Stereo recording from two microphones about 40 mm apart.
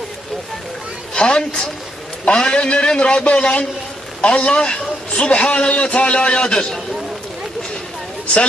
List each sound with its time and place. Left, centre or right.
1.1 s a woman's voice: left